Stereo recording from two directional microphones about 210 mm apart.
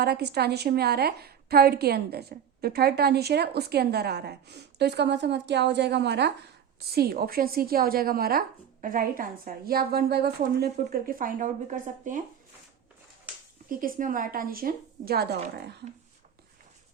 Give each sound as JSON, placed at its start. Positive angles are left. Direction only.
{"t": 0.0, "sound": "a woman's voice", "side_deg": -50}
{"t": 13.7, "sound": "a woman's voice", "side_deg": -40}